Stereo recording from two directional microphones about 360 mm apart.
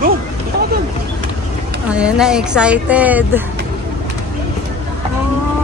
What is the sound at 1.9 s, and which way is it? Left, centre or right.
Speech, centre.